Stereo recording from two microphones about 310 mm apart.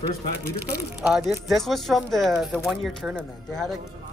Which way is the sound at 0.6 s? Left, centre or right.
Centre.